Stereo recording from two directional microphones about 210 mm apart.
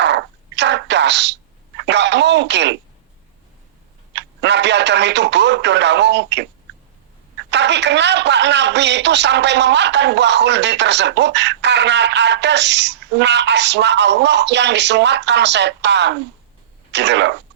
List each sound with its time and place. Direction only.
0.0 s a sound: 55° right (ahead or behind)
1.8 s a man's voice: 55° right (ahead or behind)
4.1 s a man's voice: 55° right (ahead or behind)
7.5 s a man's voice: 55° right (ahead or behind)